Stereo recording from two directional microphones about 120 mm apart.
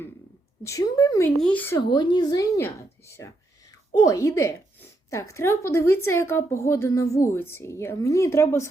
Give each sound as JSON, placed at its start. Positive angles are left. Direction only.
{"t": 0.6, "sound": "speech", "side_deg": 25}
{"t": 1.4, "sound": "speech", "side_deg": 10}
{"t": 1.8, "sound": "a woman's voice", "side_deg": 40}
{"t": 2.6, "sound": "speech", "side_deg": 20}